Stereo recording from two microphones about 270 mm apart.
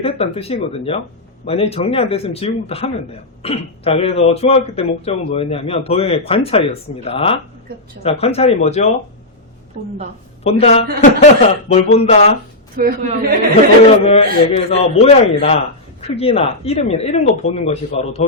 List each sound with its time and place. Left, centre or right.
0.0 s a man's voice: left
9.7 s a woman's voice: right
10.4 s a man's voice: left
12.7 s a woman's voice: right
14.0 s a man's voice: left